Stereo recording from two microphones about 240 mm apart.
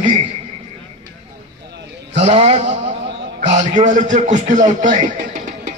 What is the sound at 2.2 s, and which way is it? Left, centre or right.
A man's voice, right.